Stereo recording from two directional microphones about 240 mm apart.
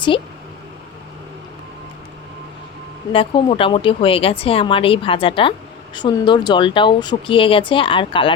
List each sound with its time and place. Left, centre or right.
3.1 s speech: left